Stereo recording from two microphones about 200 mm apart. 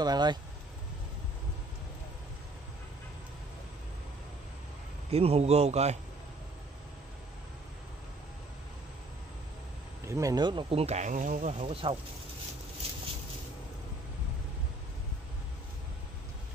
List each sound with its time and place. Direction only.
0.0 s speech: 20° right (ahead or behind)
5.1 s a man's voice: 30° right (ahead or behind)
10.0 s speech: 15° right (ahead or behind)